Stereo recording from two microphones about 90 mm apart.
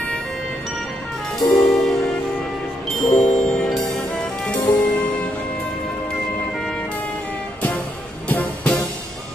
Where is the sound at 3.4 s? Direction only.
5° left (ahead or behind).